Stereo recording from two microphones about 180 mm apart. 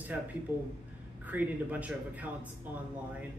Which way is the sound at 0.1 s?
10° right (ahead or behind).